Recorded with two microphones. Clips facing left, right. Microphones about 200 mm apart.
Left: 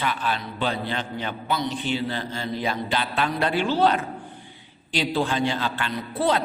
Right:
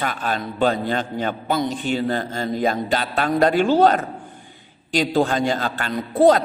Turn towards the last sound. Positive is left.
turn(degrees=-45)  # may be behind; listen again after turning